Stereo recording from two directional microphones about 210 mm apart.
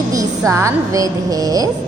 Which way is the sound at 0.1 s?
15° right (ahead or behind).